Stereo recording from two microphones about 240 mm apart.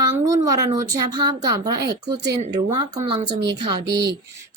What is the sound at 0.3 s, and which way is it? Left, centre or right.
A woman's voice, centre.